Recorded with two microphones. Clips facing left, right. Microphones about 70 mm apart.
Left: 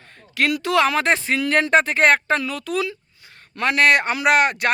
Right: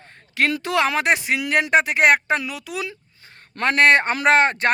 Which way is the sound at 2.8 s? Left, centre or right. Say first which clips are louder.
Left 4 dB; right.